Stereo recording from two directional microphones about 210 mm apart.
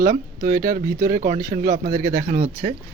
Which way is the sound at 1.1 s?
40° right (ahead or behind).